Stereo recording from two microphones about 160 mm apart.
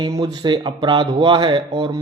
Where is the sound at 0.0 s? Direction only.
25° right (ahead or behind).